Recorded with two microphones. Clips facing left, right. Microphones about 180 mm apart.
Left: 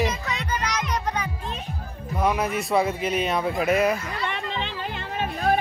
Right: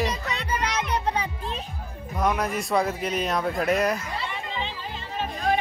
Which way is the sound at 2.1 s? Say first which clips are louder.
Left 1 dB; 5° left (ahead or behind).